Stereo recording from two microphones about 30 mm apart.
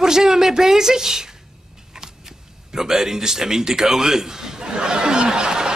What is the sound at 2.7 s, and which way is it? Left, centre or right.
A man's voice, centre.